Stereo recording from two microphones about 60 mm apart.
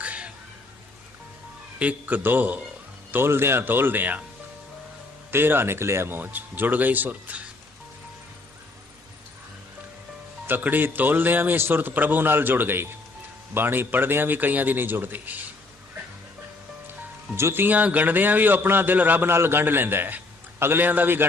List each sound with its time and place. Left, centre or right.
0.0 s a sound: right
1.8 s a man's voice: right
5.3 s a man's voice: right
10.4 s a man's voice: right
17.3 s a man's voice: right